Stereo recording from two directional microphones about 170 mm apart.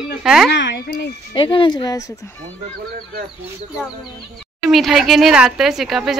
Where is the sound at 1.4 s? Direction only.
30° left (ahead or behind).